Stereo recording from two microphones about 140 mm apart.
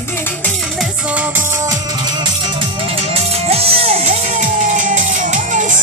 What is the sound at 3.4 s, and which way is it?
Music, 45° right (ahead or behind).